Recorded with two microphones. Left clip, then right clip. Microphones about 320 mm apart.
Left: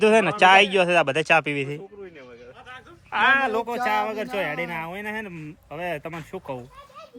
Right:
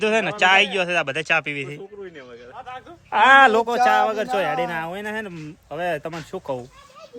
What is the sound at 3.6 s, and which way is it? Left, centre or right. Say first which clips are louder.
Speech: right 7 dB; centre.